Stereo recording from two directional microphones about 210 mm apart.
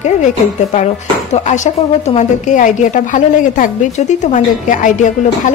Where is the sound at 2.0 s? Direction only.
35° left (ahead or behind).